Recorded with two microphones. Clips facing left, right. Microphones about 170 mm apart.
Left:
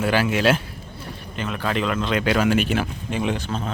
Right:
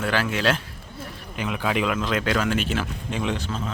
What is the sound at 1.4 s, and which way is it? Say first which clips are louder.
Speech: even; 10° right (ahead or behind).